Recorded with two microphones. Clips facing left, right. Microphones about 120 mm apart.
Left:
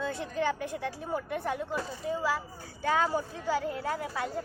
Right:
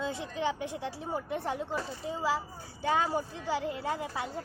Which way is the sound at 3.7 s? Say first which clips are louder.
Left 1 dB; 20° right (ahead or behind).